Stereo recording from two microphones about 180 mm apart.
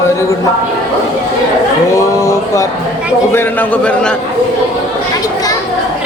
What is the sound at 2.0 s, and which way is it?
Speech, 15° left (ahead or behind).